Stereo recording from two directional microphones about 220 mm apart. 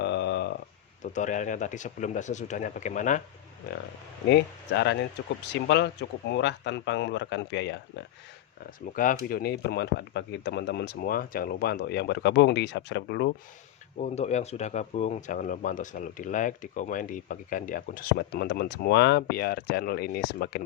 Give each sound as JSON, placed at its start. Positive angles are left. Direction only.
{"t": 0.0, "sound": "a sound", "side_deg": 50}
{"t": 1.1, "sound": "speech", "side_deg": 35}
{"t": 4.3, "sound": "speech", "side_deg": 50}
{"t": 8.9, "sound": "speech", "side_deg": 35}
{"t": 14.0, "sound": "speech", "side_deg": 30}